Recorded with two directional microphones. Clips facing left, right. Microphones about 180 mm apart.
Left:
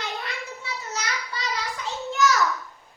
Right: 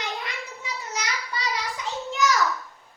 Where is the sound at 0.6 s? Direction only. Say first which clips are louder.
Right 3 dB; 15° right (ahead or behind).